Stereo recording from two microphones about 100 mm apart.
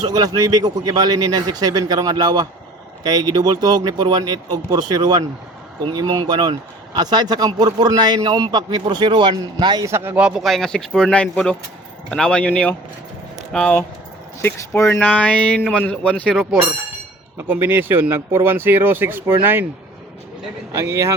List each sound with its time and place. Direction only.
0.1 s speech: 40° right (ahead or behind)
9.8 s speech: 25° right (ahead or behind)
10.2 s speech: 5° right (ahead or behind)
17.5 s speech: 20° right (ahead or behind)
20.7 s speech: 30° right (ahead or behind)